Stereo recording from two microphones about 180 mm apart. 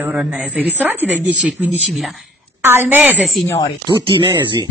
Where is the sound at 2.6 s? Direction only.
10° right (ahead or behind).